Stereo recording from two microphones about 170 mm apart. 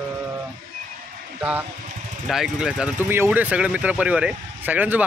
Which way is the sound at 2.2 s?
Centre (ahead or behind).